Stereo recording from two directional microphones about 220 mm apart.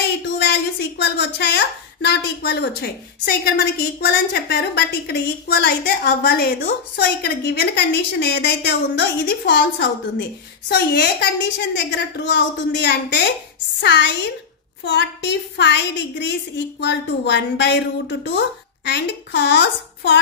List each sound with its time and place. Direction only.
0.5 s a woman's voice: 50° left (ahead or behind)